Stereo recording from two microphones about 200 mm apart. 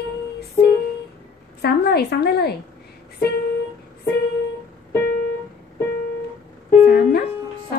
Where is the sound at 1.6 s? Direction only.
55° left (ahead or behind).